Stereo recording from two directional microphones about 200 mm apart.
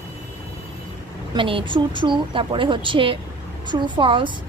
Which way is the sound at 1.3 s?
25° right (ahead or behind).